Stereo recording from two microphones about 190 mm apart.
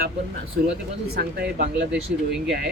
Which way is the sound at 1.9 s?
5° right (ahead or behind).